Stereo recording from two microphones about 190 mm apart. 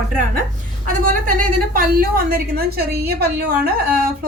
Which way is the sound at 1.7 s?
50° right (ahead or behind).